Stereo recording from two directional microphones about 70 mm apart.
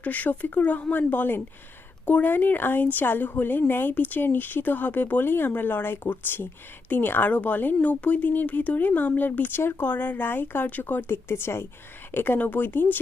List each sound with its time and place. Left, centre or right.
0.0 s speech: left